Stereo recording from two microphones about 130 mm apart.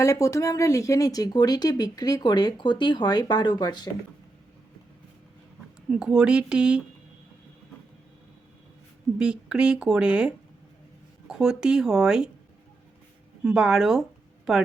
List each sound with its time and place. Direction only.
0.0 s speech: 25° left (ahead or behind)
5.9 s speech: 5° right (ahead or behind)
9.1 s speech: 5° right (ahead or behind)
13.4 s speech: 5° right (ahead or behind)